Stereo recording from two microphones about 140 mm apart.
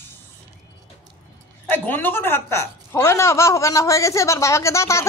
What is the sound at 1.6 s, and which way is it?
A woman's voice, 15° left (ahead or behind).